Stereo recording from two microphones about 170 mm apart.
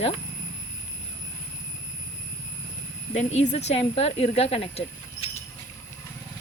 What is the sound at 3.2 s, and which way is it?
Speech, 40° left (ahead or behind).